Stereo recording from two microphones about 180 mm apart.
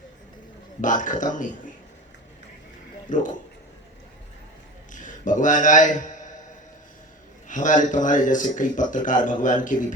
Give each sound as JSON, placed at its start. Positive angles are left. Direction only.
{"t": 0.8, "sound": "a man's voice", "side_deg": 45}
{"t": 3.1, "sound": "a man's voice", "side_deg": 45}
{"t": 4.9, "sound": "a man's voice", "side_deg": 45}
{"t": 7.4, "sound": "a man's voice", "side_deg": 45}